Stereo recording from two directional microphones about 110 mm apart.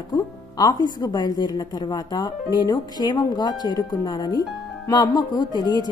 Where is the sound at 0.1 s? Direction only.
40° left (ahead or behind).